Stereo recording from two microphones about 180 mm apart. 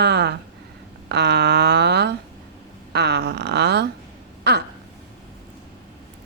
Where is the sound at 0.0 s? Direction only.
70° right (ahead or behind).